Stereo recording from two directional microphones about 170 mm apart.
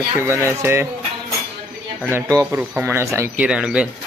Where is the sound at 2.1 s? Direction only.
15° right (ahead or behind).